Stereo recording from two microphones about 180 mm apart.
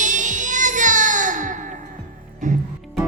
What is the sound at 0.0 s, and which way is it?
Music, 45° right (ahead or behind).